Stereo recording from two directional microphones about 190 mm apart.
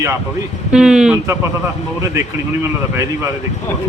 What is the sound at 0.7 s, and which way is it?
Speech, 5° right (ahead or behind).